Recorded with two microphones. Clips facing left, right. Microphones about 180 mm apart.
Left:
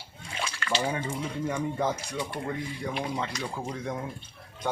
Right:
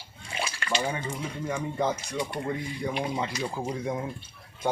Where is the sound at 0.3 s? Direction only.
10° right (ahead or behind).